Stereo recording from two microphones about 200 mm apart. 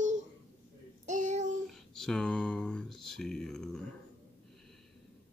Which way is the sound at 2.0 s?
5° left (ahead or behind).